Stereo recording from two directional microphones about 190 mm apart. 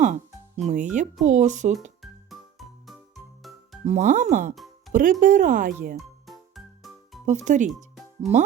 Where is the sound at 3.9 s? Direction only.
40° right (ahead or behind).